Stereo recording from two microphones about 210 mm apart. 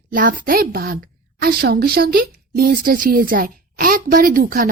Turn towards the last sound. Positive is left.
turn(degrees=-45)  # may be behind; listen again after turning